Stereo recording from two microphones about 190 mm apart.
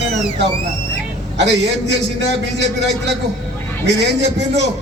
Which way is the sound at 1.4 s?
65° right (ahead or behind).